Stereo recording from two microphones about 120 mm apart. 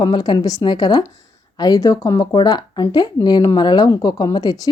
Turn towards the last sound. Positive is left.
turn(degrees=30)  # may be behind; listen again after turning